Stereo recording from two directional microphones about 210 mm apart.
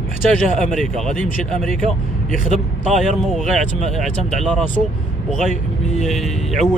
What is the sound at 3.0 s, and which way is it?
Speech, centre (ahead or behind).